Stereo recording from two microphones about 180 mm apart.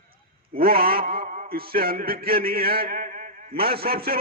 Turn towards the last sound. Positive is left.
turn(degrees=-55)  # may be behind; listen again after turning